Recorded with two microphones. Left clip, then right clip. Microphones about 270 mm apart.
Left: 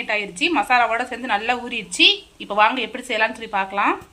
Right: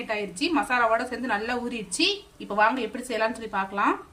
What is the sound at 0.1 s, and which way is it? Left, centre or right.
A woman's voice, centre.